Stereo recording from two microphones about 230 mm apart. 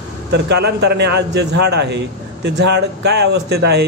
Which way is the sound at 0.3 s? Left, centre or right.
Right.